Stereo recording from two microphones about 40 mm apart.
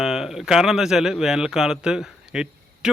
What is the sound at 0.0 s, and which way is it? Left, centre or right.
Speech, centre.